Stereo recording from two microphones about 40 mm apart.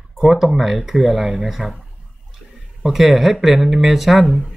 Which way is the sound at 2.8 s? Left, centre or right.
Centre.